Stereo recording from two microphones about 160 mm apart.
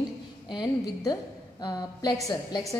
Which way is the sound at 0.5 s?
25° left (ahead or behind).